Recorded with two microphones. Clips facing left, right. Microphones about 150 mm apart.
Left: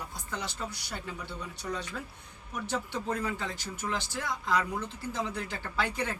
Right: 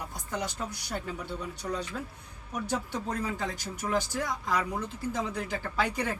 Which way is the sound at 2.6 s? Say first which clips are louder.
Even; 40° right (ahead or behind).